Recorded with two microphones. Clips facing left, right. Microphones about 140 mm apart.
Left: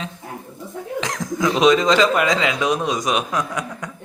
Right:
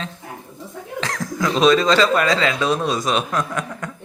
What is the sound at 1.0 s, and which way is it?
A woman's voice, 20° left (ahead or behind).